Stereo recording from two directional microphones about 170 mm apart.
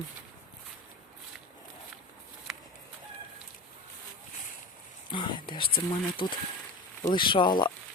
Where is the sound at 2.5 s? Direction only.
Centre (ahead or behind).